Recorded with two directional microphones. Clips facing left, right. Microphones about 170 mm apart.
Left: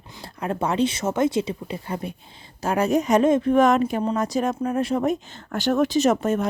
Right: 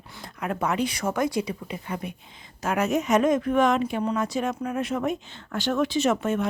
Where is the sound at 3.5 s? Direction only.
45° left (ahead or behind).